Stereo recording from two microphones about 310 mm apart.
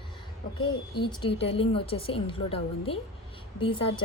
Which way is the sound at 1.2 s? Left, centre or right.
Centre.